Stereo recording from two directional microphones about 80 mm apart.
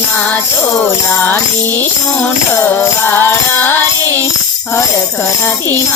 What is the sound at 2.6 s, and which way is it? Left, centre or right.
Music, left.